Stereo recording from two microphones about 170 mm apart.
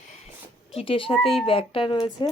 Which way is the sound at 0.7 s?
30° left (ahead or behind).